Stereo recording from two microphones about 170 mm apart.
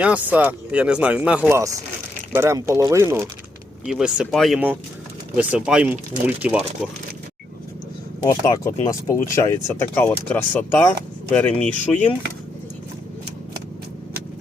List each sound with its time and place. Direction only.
0.0 s speech: 10° right (ahead or behind)
3.8 s speech: 5° right (ahead or behind)
8.3 s speech: 20° left (ahead or behind)